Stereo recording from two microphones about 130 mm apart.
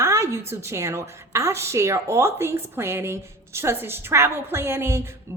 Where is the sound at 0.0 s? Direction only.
20° right (ahead or behind).